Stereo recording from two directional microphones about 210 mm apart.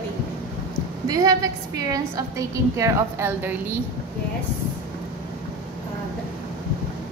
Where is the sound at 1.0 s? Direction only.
20° right (ahead or behind).